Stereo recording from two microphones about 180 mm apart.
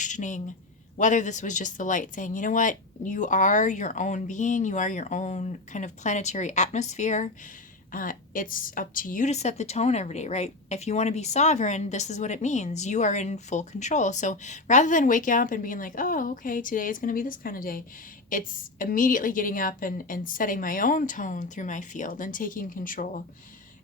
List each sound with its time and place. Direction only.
0.0 s a woman's voice: 45° left (ahead or behind)